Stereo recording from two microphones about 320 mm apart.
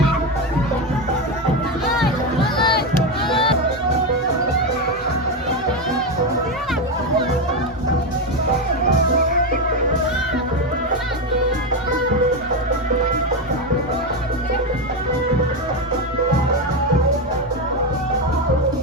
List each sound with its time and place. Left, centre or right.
2.4 s music: centre